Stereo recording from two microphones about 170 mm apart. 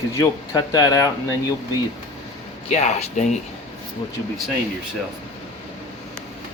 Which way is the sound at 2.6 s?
40° left (ahead or behind).